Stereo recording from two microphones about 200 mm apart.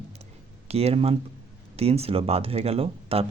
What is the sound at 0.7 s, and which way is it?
Speech, 30° right (ahead or behind).